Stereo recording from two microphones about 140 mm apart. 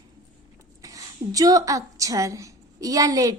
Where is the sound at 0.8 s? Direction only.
25° right (ahead or behind).